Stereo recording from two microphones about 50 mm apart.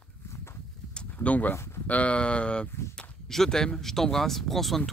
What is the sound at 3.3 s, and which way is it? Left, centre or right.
Speech, centre.